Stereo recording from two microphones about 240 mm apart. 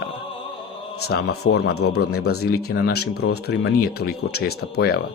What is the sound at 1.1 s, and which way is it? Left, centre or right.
A man's voice, left.